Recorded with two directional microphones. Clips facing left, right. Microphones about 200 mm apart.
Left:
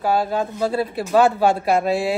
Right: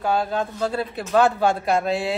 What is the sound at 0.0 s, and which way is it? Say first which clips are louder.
Speech: left 2 dB; 5° left (ahead or behind).